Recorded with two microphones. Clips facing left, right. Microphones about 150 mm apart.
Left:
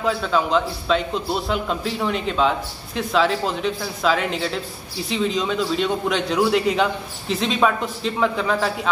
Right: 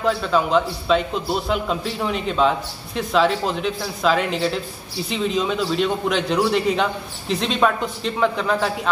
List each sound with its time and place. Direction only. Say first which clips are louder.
0.0 s a man's voice: right 1 dB; centre (ahead or behind)